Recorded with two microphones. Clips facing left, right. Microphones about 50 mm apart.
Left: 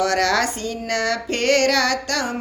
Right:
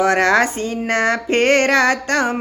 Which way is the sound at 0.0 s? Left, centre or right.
Right.